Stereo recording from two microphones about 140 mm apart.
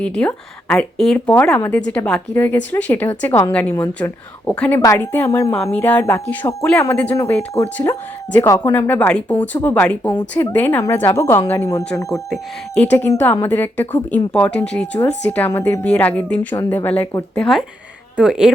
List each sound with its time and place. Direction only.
0.0 s speech: 10° left (ahead or behind)
4.8 s speech: 25° left (ahead or behind)
6.7 s speech: 10° left (ahead or behind)
8.7 s speech: 10° left (ahead or behind); by 18.5 s 5° right (ahead or behind)